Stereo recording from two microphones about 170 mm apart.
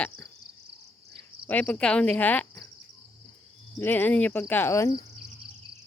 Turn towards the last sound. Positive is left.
turn(degrees=15)  # may be behind; listen again after turning